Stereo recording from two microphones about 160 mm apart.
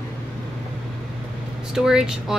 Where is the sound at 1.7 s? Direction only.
5° right (ahead or behind).